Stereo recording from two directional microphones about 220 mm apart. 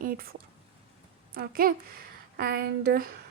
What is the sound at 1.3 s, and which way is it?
Speech, 40° right (ahead or behind).